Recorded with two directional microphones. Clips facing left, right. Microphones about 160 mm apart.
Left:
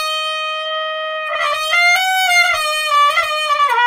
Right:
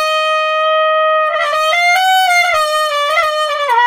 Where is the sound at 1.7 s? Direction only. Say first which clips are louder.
Right 6 dB; 40° right (ahead or behind).